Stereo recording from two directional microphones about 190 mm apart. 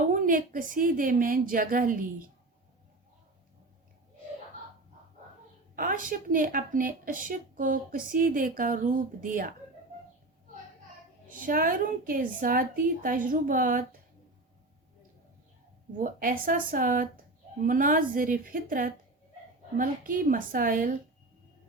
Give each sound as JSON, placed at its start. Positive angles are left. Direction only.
{"t": 0.1, "sound": "a woman's voice", "side_deg": -45}
{"t": 5.7, "sound": "a woman's voice", "side_deg": -45}
{"t": 11.3, "sound": "a woman's voice", "side_deg": -45}
{"t": 16.0, "sound": "a woman's voice", "side_deg": -45}